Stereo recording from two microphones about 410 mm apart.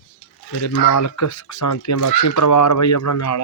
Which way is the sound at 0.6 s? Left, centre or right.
Left.